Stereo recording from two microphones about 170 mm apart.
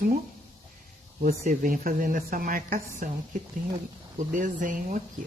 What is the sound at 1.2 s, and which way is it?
A woman's voice, 55° right (ahead or behind).